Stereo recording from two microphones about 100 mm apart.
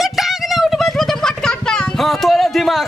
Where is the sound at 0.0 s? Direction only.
Centre (ahead or behind).